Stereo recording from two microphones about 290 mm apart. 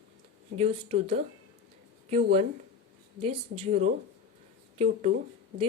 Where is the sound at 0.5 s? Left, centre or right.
Right.